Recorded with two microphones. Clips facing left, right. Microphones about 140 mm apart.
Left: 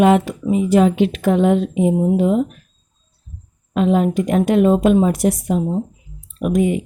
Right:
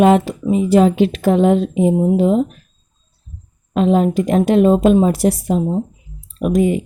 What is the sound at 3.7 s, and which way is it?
Speech, 30° right (ahead or behind).